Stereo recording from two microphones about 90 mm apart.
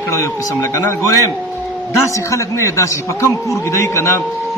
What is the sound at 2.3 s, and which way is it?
A man's voice, 35° left (ahead or behind).